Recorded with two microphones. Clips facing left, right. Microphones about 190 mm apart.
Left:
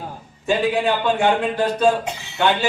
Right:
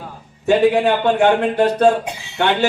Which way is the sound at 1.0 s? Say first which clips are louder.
Right 4 dB; 60° right (ahead or behind).